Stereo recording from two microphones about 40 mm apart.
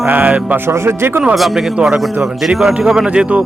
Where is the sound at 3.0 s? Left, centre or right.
Right.